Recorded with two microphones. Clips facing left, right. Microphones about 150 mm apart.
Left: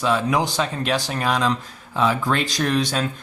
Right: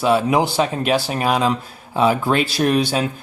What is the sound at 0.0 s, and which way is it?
Speech, 10° right (ahead or behind).